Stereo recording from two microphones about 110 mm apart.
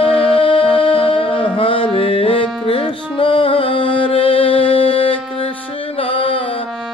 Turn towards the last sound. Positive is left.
turn(degrees=60)  # may be behind; listen again after turning